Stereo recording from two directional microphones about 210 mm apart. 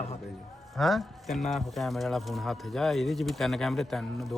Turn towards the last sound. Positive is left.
turn(degrees=0)  # may be behind; listen again after turning